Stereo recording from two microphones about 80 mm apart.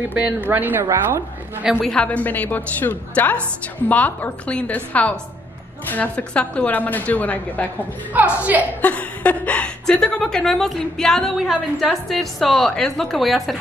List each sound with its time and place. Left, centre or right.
0.1 s speech: right
1.9 s a woman's voice: centre
2.2 s a woman's voice: left
8.1 s speech: centre
8.8 s a woman's voice: left; by 13.6 s centre